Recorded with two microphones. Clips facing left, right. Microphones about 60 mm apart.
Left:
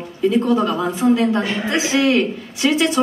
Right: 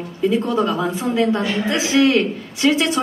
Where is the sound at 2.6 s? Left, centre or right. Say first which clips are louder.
Even; right.